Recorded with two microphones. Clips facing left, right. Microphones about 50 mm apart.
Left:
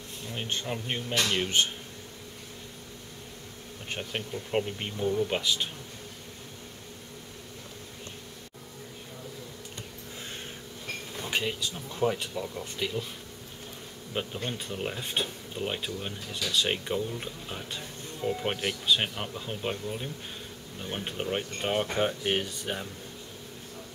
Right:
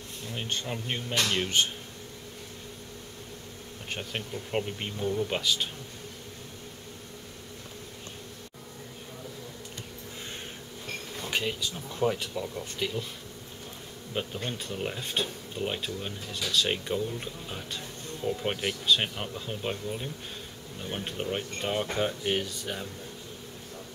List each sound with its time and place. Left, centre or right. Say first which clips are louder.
0.3 s speech: left 1 dB; centre
3.9 s speech: left 1 dB; centre
11.1 s speech: even; centre
14.1 s speech: even; centre
17.6 s speech: right 1 dB; centre